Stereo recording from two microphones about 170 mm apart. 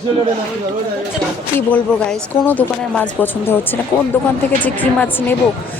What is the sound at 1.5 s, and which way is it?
Speech, 5° left (ahead or behind).